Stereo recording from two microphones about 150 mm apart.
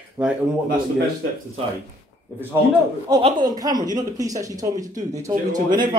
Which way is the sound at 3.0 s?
30° right (ahead or behind).